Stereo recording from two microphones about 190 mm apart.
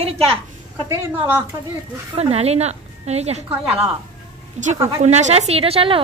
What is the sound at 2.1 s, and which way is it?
A woman's voice, 35° right (ahead or behind).